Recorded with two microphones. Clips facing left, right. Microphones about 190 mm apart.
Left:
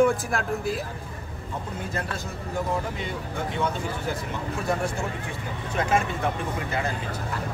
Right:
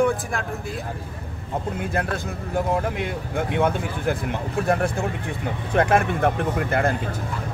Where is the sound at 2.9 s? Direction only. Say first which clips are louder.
Right 5 dB; 60° right (ahead or behind).